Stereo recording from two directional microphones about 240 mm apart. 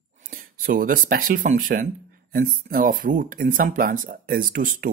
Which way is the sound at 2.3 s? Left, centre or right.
Right.